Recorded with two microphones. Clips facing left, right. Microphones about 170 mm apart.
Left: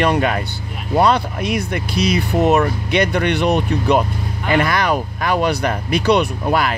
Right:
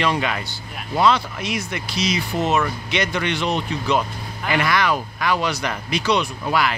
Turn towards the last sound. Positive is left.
turn(degrees=50)  # may be behind; listen again after turning